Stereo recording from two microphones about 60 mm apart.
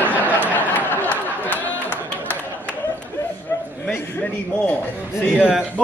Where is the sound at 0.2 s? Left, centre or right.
Left.